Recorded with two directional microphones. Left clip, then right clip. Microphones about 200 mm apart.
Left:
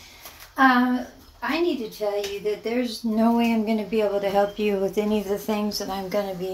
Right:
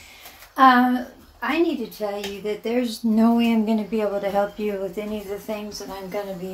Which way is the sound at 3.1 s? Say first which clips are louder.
Right 1 dB; 30° right (ahead or behind).